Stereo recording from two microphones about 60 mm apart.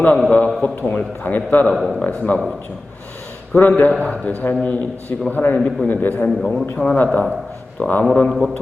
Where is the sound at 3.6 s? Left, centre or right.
Left.